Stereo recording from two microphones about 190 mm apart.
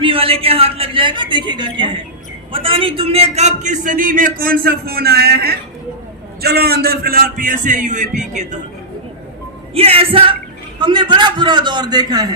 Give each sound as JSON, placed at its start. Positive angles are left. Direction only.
{"t": 0.0, "sound": "a man's voice", "side_deg": -30}
{"t": 9.7, "sound": "a man's voice", "side_deg": -30}